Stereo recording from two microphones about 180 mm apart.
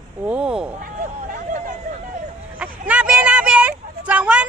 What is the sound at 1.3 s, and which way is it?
Hubbub, 45° right (ahead or behind).